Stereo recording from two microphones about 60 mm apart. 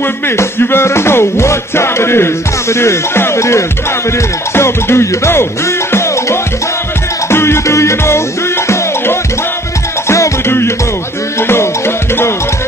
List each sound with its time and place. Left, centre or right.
0.4 s music: left